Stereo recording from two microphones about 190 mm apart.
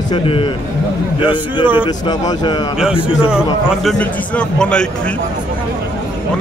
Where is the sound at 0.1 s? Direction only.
30° left (ahead or behind).